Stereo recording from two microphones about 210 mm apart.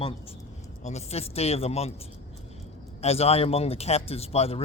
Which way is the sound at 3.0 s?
30° left (ahead or behind).